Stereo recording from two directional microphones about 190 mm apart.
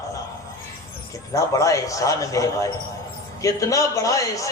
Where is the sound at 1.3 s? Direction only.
15° left (ahead or behind).